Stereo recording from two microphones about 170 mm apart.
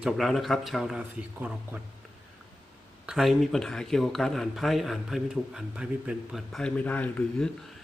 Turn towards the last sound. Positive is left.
turn(degrees=5)  # may be behind; listen again after turning